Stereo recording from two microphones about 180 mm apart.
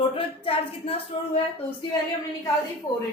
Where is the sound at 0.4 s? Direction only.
30° left (ahead or behind).